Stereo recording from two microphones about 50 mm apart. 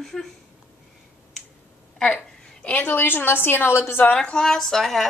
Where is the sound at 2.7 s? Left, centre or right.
Left.